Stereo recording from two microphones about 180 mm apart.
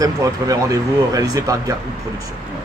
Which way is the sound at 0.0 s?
20° right (ahead or behind).